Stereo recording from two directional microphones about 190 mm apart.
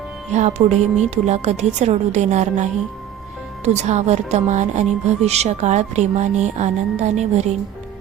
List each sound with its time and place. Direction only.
0.3 s speech: 35° right (ahead or behind)